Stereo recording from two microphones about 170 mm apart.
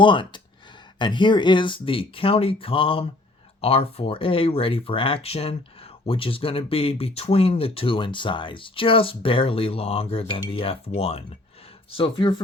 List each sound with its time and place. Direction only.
0.0 s speech: 30° left (ahead or behind)